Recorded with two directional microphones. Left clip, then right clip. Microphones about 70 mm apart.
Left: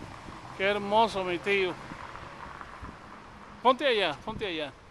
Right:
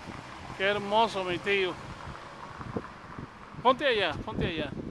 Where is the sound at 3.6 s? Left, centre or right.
Left.